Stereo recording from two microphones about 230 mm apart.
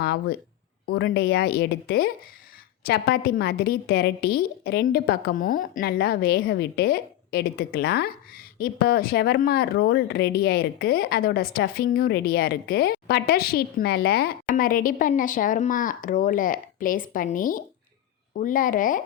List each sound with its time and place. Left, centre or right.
0.0 s a woman's voice: left